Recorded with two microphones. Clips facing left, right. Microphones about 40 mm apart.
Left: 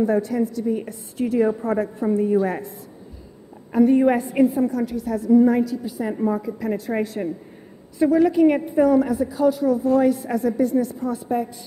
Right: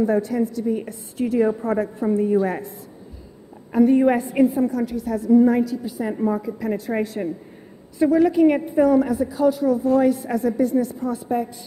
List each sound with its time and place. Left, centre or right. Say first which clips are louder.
0.0 s a woman's voice: even; centre
3.7 s a woman's voice: even; centre